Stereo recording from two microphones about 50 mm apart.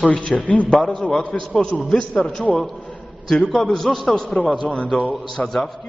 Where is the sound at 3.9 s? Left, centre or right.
Centre.